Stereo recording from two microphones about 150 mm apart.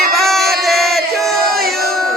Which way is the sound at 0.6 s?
Centre (ahead or behind).